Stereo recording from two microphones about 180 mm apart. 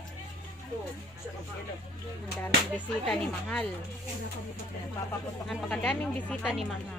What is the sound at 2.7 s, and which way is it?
Speech, 5° left (ahead or behind).